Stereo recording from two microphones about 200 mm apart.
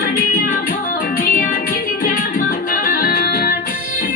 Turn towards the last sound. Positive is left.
turn(degrees=50)  # may be behind; listen again after turning